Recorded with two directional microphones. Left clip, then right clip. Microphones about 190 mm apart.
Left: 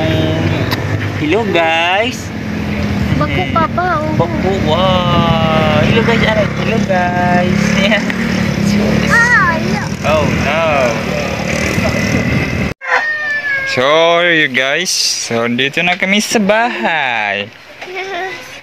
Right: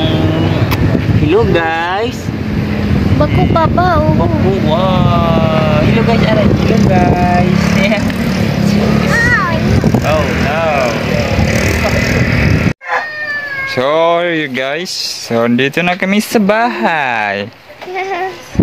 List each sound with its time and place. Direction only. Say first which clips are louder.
1.3 s speech: even; 20° left (ahead or behind)
3.5 s speech: right 3 dB; 30° right (ahead or behind)
4.6 s speech: left 3 dB; 15° left (ahead or behind)
9.2 s vehicle: left 2 dB; 15° right (ahead or behind)
10.0 s speech: left 4 dB; 20° left (ahead or behind)
13.7 s speech: left 1 dB; 5° right (ahead or behind)
15.5 s speech: right 1 dB; 25° right (ahead or behind)